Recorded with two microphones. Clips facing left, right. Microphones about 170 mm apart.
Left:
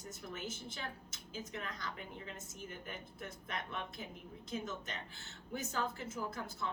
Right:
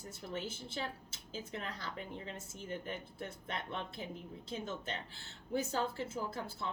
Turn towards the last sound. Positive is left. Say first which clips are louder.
# right 1 dB
turn(degrees=-30)  # may be behind; listen again after turning